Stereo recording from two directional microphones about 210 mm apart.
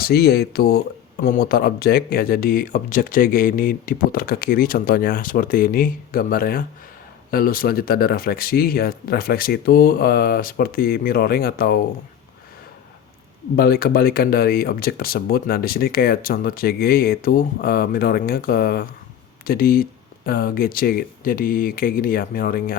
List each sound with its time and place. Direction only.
0.0 s speech: 50° left (ahead or behind)
13.6 s speech: 45° left (ahead or behind)